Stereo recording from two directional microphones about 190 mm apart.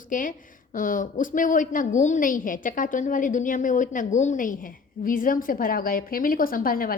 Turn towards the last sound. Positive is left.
turn(degrees=50)  # may be behind; listen again after turning